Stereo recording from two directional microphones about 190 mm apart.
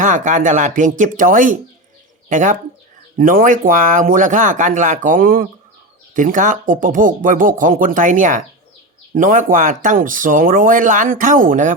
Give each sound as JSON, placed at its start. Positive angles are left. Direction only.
{"t": 0.0, "sound": "speech", "side_deg": -40}